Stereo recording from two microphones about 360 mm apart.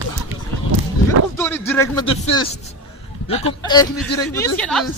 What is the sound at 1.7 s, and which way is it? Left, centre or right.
Speech, centre.